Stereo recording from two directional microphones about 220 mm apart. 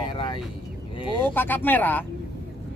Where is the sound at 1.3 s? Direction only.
10° left (ahead or behind).